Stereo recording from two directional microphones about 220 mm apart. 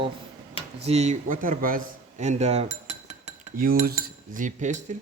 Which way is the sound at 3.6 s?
40° right (ahead or behind).